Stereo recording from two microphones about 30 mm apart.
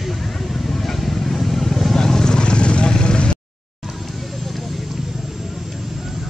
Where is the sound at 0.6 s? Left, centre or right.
Centre.